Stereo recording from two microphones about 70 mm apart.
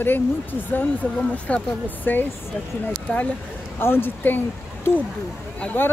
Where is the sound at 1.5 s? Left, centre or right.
Left.